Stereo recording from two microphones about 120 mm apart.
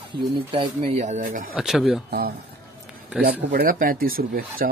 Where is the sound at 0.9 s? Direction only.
75° right (ahead or behind).